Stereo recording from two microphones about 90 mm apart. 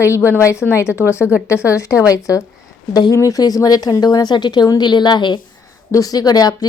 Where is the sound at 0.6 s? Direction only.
5° right (ahead or behind).